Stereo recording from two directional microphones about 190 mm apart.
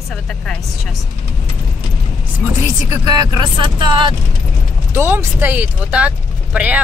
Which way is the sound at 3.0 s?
20° right (ahead or behind).